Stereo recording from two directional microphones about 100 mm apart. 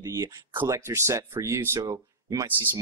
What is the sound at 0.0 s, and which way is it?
Speech, 30° right (ahead or behind).